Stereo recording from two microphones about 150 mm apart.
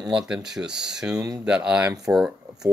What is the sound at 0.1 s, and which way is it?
Speech, 5° right (ahead or behind).